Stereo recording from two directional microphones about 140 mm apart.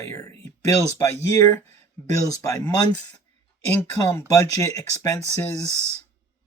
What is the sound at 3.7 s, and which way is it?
Speech, 10° left (ahead or behind).